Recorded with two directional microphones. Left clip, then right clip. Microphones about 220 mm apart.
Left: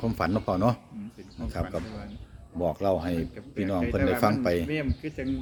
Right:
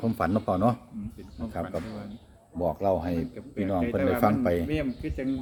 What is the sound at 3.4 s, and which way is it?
Speech, 10° left (ahead or behind).